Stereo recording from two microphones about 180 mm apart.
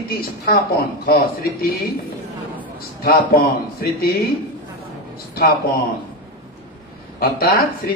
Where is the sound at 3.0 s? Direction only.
55° left (ahead or behind).